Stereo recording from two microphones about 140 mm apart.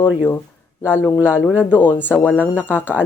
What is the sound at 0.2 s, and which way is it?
Speech, 20° left (ahead or behind).